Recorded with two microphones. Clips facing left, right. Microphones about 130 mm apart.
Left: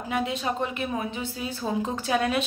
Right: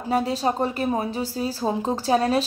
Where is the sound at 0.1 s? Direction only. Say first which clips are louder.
Right 5 dB; 35° right (ahead or behind).